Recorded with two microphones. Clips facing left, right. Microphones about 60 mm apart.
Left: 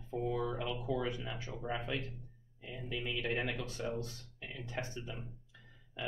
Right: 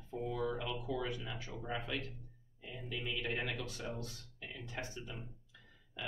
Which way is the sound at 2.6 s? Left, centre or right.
Centre.